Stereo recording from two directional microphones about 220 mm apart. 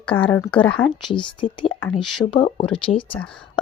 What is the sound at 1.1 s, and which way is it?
Speech, 20° left (ahead or behind).